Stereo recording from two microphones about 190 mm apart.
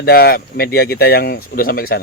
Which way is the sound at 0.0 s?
55° left (ahead or behind).